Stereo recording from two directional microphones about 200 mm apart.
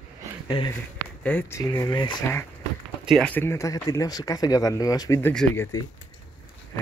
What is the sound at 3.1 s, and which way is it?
Speech, 5° left (ahead or behind).